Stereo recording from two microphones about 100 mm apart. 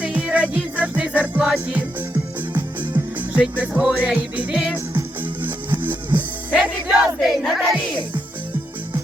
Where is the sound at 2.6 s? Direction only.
20° right (ahead or behind).